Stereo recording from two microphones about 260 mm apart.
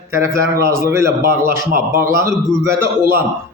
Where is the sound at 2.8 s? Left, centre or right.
Right.